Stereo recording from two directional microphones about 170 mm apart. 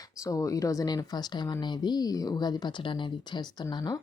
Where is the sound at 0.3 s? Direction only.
20° left (ahead or behind).